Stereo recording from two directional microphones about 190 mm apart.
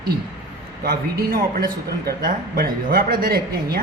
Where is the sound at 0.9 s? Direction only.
50° right (ahead or behind).